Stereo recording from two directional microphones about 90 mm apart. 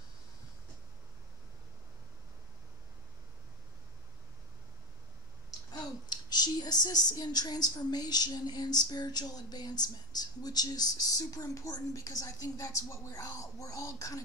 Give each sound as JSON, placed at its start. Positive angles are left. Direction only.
{"t": 5.7, "sound": "speech", "side_deg": 50}